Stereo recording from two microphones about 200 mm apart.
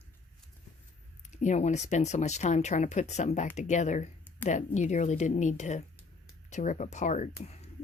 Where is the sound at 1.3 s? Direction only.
35° left (ahead or behind).